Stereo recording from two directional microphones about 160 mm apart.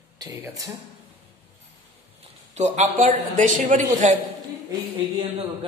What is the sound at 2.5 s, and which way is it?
A man's voice, 45° right (ahead or behind).